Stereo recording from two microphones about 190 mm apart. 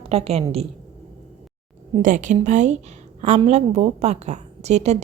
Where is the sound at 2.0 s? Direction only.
40° right (ahead or behind).